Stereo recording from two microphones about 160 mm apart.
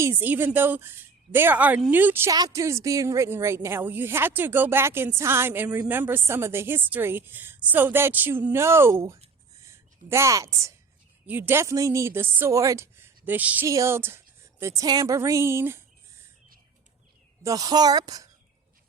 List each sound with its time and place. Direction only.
0.0 s a woman's voice: 15° right (ahead or behind)
17.4 s speech: 20° right (ahead or behind)